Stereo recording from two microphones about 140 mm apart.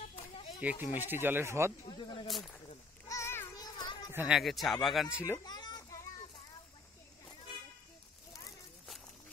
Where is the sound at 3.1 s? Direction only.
20° left (ahead or behind).